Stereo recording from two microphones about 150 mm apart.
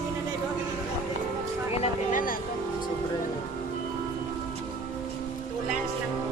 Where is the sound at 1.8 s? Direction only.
65° left (ahead or behind).